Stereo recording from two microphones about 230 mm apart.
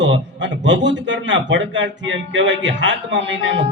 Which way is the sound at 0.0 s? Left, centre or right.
Right.